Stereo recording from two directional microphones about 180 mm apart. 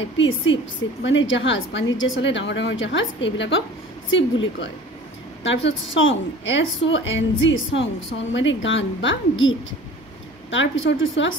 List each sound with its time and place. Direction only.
0.0 s a woman's voice: 90° left